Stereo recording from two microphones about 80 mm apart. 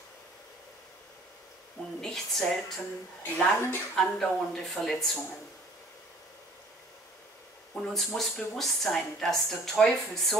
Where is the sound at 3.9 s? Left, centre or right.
Centre.